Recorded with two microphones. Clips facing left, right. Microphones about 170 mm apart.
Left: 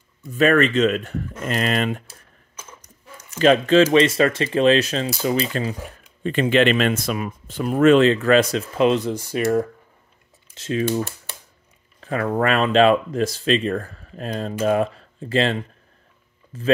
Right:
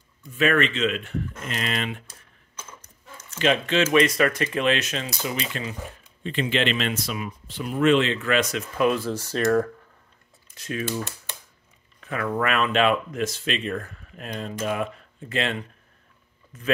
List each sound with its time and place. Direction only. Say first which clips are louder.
0.3 s speech: left 5 dB; 40° left (ahead or behind)
2.0 s a sound: left 3 dB; 10° left (ahead or behind)
3.3 s speech: left 7 dB; 40° left (ahead or behind)
6.2 s speech: left 7 dB; 50° left (ahead or behind); by 9.7 s 15° left (ahead or behind)
10.5 s speech: left 7 dB; 25° left (ahead or behind)
12.0 s speech: left 5 dB; 30° left (ahead or behind)